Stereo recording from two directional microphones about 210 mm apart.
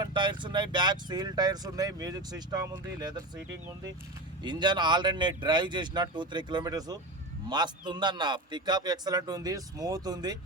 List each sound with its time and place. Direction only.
0.0 s a man's voice: 20° right (ahead or behind)
4.4 s a man's voice: 20° right (ahead or behind)